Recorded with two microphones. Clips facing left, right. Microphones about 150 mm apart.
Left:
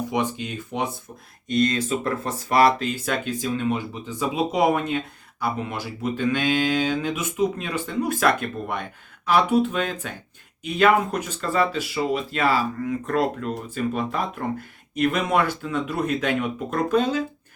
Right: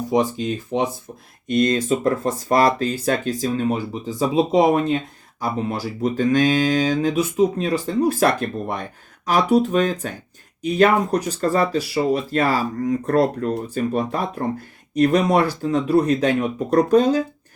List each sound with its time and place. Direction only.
0.1 s speech: 35° right (ahead or behind)